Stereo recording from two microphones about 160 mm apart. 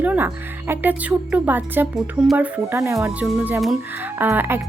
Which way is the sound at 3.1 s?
5° right (ahead or behind).